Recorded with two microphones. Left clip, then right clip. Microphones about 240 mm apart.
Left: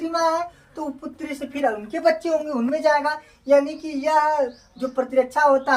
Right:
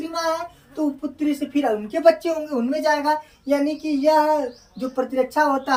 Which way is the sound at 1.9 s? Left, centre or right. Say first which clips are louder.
Right 4 dB; centre.